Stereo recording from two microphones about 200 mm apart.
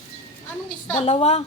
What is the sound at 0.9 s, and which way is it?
Speech, 30° left (ahead or behind).